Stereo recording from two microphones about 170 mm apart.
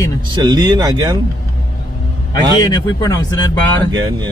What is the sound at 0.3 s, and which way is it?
Speech, 25° right (ahead or behind).